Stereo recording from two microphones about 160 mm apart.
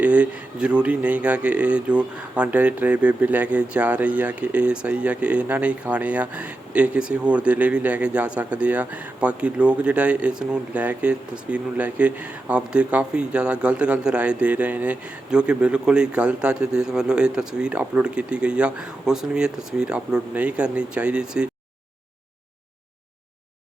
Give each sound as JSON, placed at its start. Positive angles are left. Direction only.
{"t": 0.0, "sound": "speech", "side_deg": -10}